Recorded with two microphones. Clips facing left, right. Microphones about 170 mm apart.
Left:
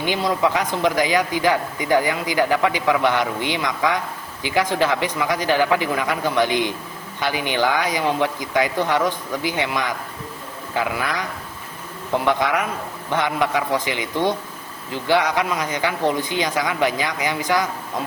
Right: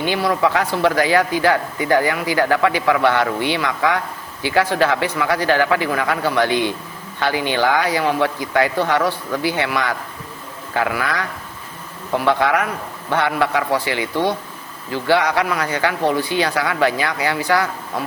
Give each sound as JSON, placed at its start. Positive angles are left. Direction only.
{"t": 0.1, "sound": "speech", "side_deg": 20}